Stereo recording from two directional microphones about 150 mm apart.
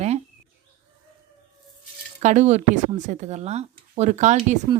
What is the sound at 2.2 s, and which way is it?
Speech, 50° right (ahead or behind).